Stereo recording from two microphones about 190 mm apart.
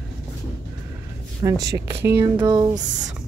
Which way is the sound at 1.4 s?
20° right (ahead or behind).